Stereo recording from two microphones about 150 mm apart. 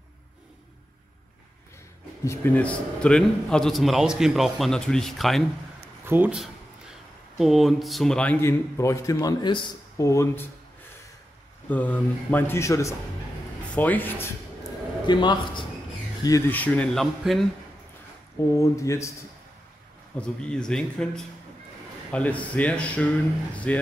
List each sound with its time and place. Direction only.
2.2 s a man's voice: 10° left (ahead or behind)
6.0 s speech: 10° right (ahead or behind); by 10.0 s 30° left (ahead or behind)
10.0 s speech: 20° left (ahead or behind)
11.7 s speech: 10° left (ahead or behind)
15.0 s a man's voice: 30° left (ahead or behind)
16.5 s a man's voice: 10° left (ahead or behind)
18.5 s speech: 20° left (ahead or behind)
20.2 s a man's voice: 5° left (ahead or behind)